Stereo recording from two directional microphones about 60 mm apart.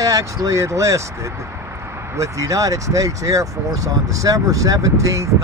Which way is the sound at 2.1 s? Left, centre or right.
Right.